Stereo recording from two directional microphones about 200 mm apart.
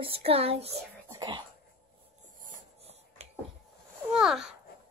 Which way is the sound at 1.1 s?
20° right (ahead or behind).